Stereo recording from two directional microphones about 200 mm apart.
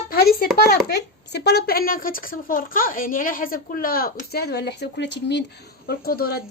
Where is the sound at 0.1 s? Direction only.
50° left (ahead or behind).